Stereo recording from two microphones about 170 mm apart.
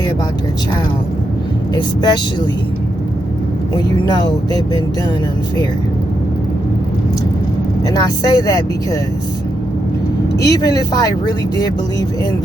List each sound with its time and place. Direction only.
1.7 s speech: 25° left (ahead or behind)
3.8 s speech: 25° left (ahead or behind)
7.9 s speech: 20° left (ahead or behind)
10.3 s speech: 20° left (ahead or behind)